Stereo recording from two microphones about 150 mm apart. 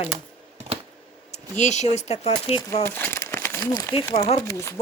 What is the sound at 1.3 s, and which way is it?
A woman's voice, 50° left (ahead or behind).